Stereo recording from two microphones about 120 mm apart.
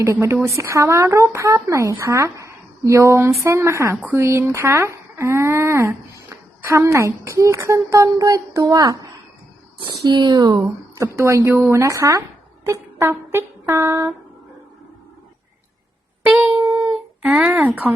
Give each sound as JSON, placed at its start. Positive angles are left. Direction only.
{"t": 0.0, "sound": "speech", "side_deg": -25}
{"t": 16.2, "sound": "a sound", "side_deg": -10}
{"t": 17.2, "sound": "speech", "side_deg": -10}